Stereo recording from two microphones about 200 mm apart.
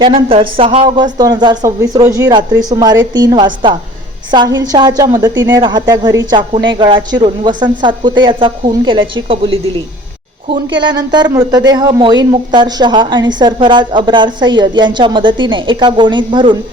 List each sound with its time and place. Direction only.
0.0 s a woman's voice: 25° right (ahead or behind)
10.8 s a woman's voice: 20° right (ahead or behind)